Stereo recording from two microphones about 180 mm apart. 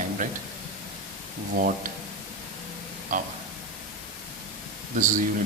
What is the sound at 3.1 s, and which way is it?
Speech, 45° right (ahead or behind).